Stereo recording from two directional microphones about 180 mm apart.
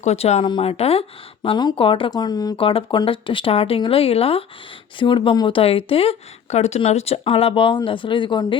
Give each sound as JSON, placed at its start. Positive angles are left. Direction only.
{"t": 0.0, "sound": "speech", "side_deg": 35}